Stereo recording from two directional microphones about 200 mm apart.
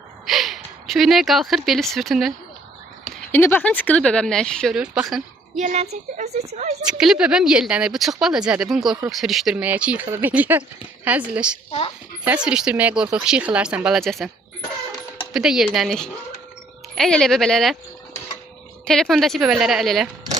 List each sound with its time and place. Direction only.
0.3 s speech: centre (ahead or behind)
3.3 s speech: 10° left (ahead or behind)
5.5 s speech: 35° right (ahead or behind)
6.8 s speech: 5° right (ahead or behind)
15.3 s speech: centre (ahead or behind)
18.9 s speech: 5° left (ahead or behind)